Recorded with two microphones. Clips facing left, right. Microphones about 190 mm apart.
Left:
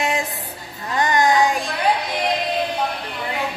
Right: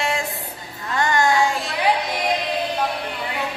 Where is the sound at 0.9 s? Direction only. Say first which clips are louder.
Left 2 dB; 20° left (ahead or behind).